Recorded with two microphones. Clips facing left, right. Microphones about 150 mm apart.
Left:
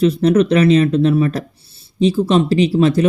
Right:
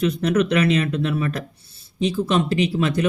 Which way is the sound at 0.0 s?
30° left (ahead or behind).